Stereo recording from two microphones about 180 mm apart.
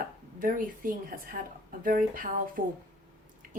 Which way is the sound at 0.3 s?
50° right (ahead or behind).